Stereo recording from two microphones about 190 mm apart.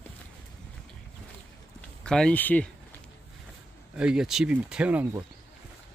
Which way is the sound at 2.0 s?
5° left (ahead or behind).